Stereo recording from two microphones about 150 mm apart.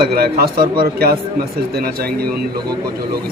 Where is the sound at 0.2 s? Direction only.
85° right.